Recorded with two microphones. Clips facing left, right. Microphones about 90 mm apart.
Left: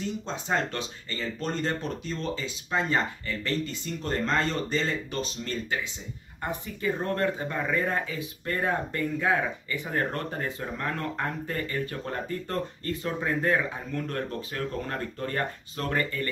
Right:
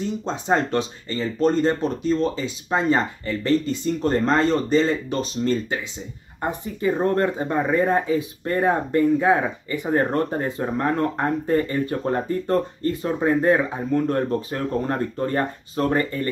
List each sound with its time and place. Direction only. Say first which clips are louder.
0.2 s speech: right 9 dB; 30° right (ahead or behind)